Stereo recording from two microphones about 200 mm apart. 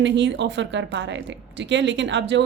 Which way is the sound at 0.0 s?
65° right (ahead or behind).